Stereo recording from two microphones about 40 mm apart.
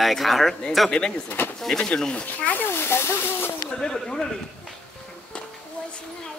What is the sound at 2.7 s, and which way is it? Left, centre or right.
Speech, left.